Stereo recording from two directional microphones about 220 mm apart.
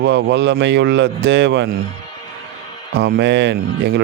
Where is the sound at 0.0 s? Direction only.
50° right (ahead or behind).